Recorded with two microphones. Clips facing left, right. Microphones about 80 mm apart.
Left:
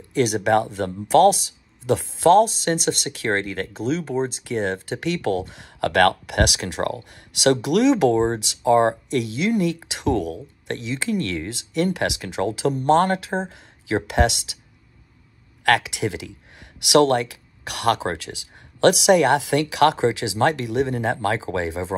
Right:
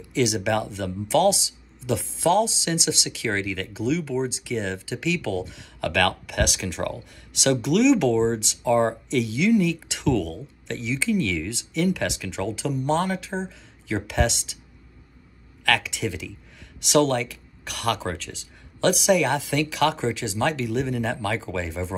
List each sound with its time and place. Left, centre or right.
0.1 s speech: left
15.6 s speech: left